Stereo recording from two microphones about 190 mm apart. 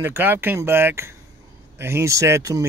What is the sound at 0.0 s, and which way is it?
Speech, 10° right (ahead or behind).